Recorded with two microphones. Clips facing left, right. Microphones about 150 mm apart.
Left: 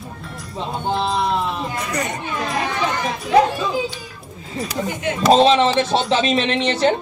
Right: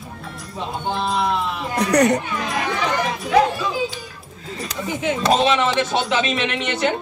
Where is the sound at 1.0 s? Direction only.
Centre (ahead or behind).